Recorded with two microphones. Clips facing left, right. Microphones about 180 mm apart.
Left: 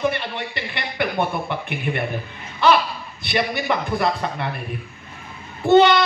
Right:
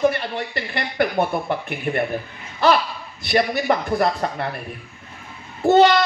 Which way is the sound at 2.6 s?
40° right (ahead or behind).